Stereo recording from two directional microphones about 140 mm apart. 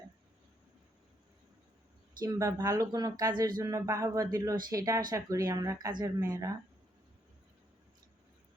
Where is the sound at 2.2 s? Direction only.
25° right (ahead or behind).